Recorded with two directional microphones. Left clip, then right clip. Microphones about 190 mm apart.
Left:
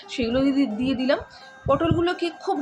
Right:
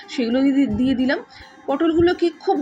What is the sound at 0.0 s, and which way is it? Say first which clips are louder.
A woman's voice: right 3 dB; 5° right (ahead or behind).